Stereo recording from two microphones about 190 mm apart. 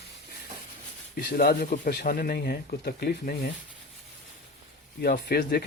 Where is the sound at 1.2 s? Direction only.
55° left (ahead or behind).